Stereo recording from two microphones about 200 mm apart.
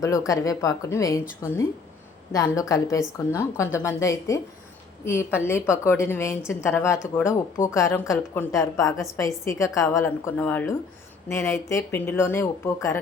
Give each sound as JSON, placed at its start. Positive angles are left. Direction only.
{"t": 0.0, "sound": "a woman's voice", "side_deg": 15}